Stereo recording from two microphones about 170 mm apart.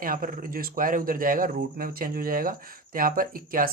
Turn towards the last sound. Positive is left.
turn(degrees=-55)  # may be behind; listen again after turning